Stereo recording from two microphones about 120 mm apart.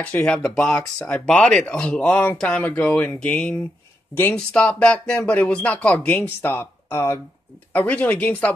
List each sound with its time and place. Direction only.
0.0 s speech: 10° left (ahead or behind)